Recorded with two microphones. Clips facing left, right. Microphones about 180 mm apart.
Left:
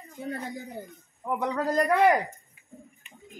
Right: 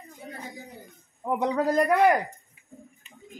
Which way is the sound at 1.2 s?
20° right (ahead or behind).